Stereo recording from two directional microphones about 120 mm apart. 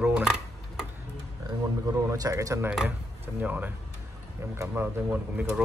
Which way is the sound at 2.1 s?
25° right (ahead or behind).